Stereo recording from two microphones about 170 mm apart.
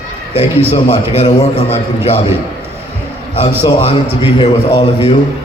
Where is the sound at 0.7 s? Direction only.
35° left (ahead or behind).